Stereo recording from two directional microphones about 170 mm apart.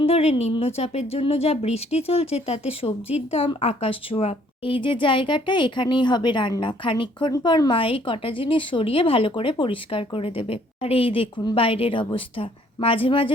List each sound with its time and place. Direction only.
0.0 s a woman's voice: 35° left (ahead or behind)